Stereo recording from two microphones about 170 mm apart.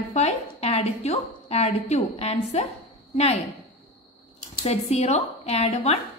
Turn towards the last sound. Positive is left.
turn(degrees=35)  # may be behind; listen again after turning